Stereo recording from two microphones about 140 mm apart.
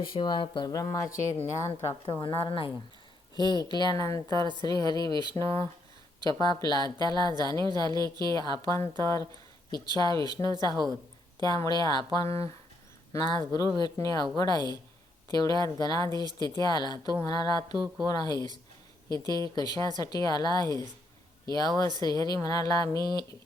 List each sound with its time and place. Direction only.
0.0 s speech: 35° left (ahead or behind); by 2.2 s 20° left (ahead or behind)
2.2 s speech: 40° left (ahead or behind)
3.3 s speech: 30° right (ahead or behind)
3.6 s speech: 30° left (ahead or behind)